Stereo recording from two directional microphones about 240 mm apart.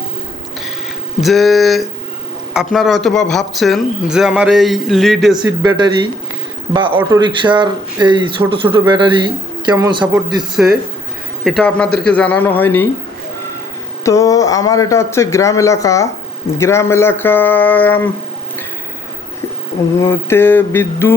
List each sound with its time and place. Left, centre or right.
1.2 s speech: centre
5.6 s speech: centre
11.4 s speech: centre
14.0 s a man's voice: centre
20.0 s a man's voice: centre